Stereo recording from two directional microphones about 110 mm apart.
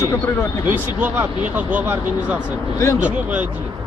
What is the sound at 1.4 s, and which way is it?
Speech, 15° right (ahead or behind).